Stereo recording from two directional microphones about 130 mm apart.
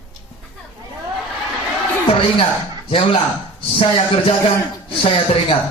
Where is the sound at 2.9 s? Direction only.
45° left (ahead or behind).